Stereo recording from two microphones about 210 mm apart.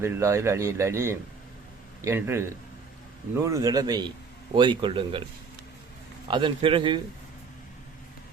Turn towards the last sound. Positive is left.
turn(degrees=-25)  # may be behind; listen again after turning